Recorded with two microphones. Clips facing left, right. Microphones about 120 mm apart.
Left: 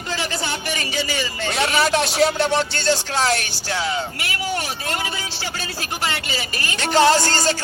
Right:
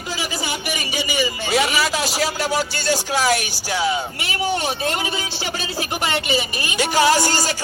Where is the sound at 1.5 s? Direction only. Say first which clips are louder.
Left 1 dB; centre (ahead or behind); by 4.9 s 25° right (ahead or behind).